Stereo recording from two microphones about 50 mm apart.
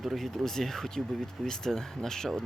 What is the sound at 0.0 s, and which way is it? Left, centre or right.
Speech, centre.